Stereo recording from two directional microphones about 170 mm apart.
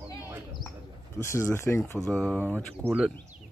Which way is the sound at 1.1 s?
15° left (ahead or behind).